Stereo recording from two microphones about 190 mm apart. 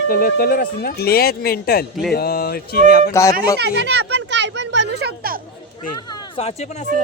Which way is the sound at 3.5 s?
65° right (ahead or behind).